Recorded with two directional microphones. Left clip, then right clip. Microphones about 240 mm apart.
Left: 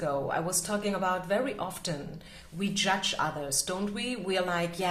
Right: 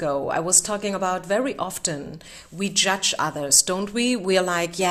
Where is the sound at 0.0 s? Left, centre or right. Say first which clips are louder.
Right 6 dB; right.